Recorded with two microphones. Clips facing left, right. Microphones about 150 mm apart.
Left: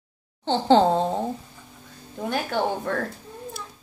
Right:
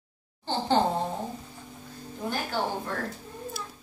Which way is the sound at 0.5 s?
90° left.